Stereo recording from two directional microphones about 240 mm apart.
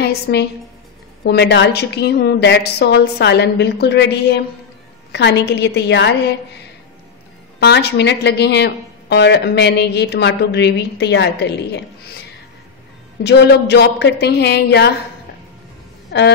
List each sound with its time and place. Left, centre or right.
0.0 s speech: left
7.6 s speech: left
13.2 s speech: left
16.1 s speech: left